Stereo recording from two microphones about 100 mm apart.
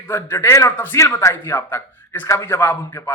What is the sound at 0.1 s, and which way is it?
A man's voice, 25° left (ahead or behind).